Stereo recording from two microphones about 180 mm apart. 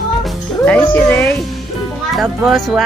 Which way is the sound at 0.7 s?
10° left (ahead or behind).